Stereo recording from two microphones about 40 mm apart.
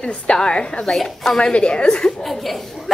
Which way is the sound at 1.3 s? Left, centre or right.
Left.